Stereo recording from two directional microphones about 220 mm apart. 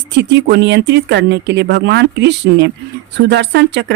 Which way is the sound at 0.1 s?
50° right (ahead or behind).